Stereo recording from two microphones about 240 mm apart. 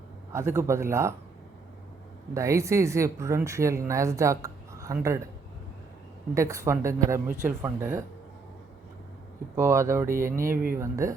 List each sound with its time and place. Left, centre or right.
0.3 s speech: centre
2.3 s speech: centre
6.3 s speech: centre
9.6 s speech: centre
10.5 s speech: right
10.8 s speech: centre